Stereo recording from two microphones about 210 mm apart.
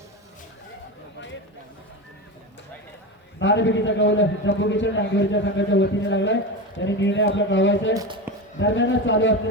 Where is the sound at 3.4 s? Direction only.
60° left (ahead or behind).